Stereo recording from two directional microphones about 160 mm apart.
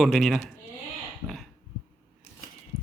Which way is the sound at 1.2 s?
20° right (ahead or behind).